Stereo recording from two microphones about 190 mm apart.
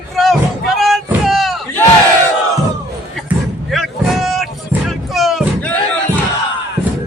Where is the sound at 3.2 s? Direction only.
Centre (ahead or behind).